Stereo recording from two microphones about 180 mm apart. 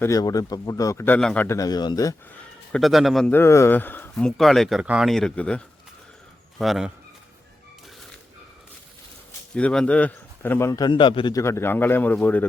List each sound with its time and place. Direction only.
0.0 s a man's voice: 20° left (ahead or behind)
2.4 s a man's voice: centre (ahead or behind)
3.3 s speech: 15° left (ahead or behind); by 6.9 s centre (ahead or behind)
9.6 s a man's voice: 5° left (ahead or behind)